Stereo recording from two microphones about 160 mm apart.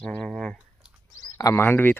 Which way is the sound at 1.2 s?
20° left (ahead or behind).